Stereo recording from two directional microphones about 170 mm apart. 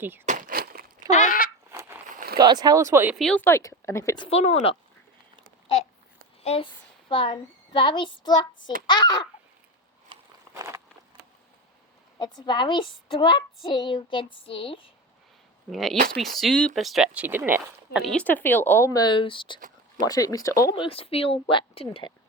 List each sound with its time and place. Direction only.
0.3 s a sound: 50° right (ahead or behind)
1.1 s speech: 50° left (ahead or behind)
1.7 s a sound: 15° right (ahead or behind)
2.1 s boat: 60° right (ahead or behind)
2.4 s speech: 25° right (ahead or behind)
3.2 s speech: 5° left (ahead or behind)
3.4 s speech: 15° left (ahead or behind)
4.3 s speech: 35° left (ahead or behind)
6.4 s a woman's voice: 35° left (ahead or behind)
10.1 s walk: 30° right (ahead or behind)
10.5 s a sound: 15° right (ahead or behind)
12.2 s a child's voice: 25° left (ahead or behind)
15.7 s speech: centre (ahead or behind)
18.0 s a child's voice: 5° left (ahead or behind); by 22.1 s 30° left (ahead or behind)